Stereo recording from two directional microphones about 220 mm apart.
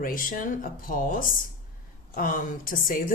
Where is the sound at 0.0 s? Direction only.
40° left (ahead or behind).